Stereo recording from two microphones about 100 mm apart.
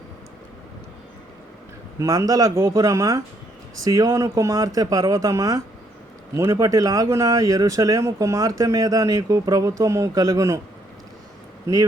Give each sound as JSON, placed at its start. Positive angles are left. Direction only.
{"t": 2.0, "sound": "speech", "side_deg": -35}